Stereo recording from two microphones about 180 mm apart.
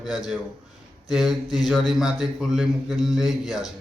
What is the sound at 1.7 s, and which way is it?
Speech, centre (ahead or behind).